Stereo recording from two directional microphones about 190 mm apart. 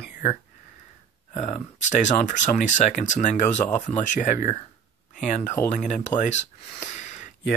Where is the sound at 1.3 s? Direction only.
40° left (ahead or behind).